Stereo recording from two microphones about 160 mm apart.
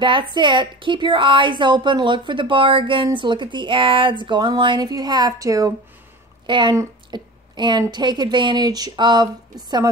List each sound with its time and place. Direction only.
0.0 s a woman's voice: 30° right (ahead or behind)